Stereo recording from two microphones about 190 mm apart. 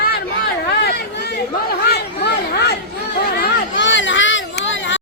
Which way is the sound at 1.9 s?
60° left (ahead or behind).